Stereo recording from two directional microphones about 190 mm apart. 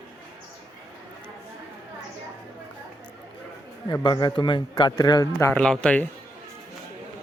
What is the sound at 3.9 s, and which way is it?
A man's voice, 20° left (ahead or behind).